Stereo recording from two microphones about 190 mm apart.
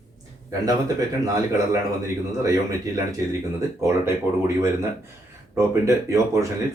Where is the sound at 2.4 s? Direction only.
15° right (ahead or behind).